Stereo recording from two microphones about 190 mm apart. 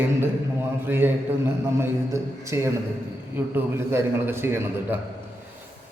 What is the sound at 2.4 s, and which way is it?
A man's voice, 15° right (ahead or behind).